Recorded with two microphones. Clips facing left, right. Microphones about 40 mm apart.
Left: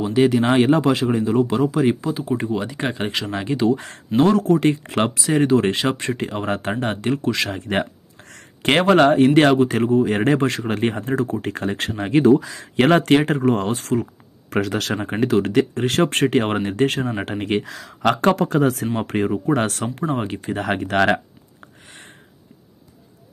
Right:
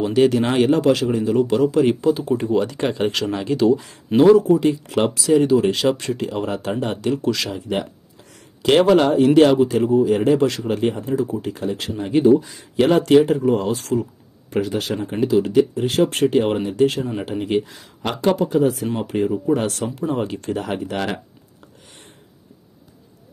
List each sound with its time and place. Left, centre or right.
0.1 s speech: centre; by 1.2 s left
1.5 s speech: centre; by 3.7 s left
3.7 s speech: left
7.5 s speech: left
10.4 s speech: left
10.7 s speech: left
12.0 s speech: left
12.7 s speech: left
14.5 s speech: left
18.1 s speech: left
19.4 s speech: left
20.5 s speech: left
20.8 s speech: left